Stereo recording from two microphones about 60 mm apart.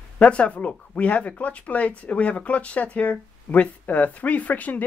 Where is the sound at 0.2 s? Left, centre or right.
Left.